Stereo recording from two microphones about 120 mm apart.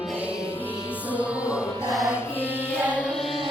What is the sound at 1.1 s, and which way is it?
Music, 10° right (ahead or behind).